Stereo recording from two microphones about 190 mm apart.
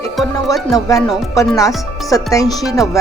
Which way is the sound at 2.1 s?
20° left (ahead or behind).